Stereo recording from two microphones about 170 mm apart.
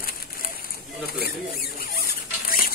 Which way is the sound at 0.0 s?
60° left (ahead or behind).